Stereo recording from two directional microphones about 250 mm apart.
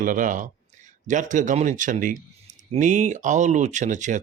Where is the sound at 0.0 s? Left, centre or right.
Right.